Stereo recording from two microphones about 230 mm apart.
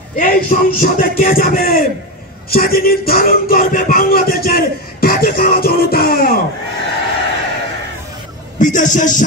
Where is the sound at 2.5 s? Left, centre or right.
Left.